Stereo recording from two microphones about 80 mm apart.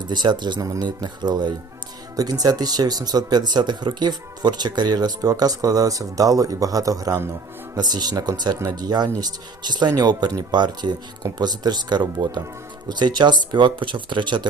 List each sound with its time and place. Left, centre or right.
0.0 s speech: right
0.6 s speech: right
0.9 s speech: right
2.1 s speech: right